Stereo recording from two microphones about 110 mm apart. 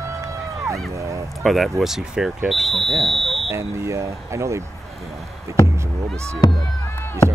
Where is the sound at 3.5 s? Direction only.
25° right (ahead or behind).